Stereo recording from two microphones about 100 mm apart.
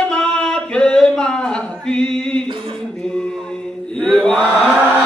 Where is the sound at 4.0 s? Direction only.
5° left (ahead or behind).